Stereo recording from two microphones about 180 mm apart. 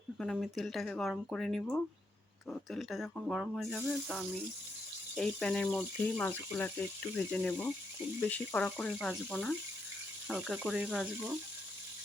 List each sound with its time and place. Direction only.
0.2 s speech: centre (ahead or behind)